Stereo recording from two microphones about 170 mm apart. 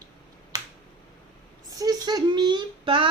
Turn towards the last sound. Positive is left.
turn(degrees=-30)  # may be behind; listen again after turning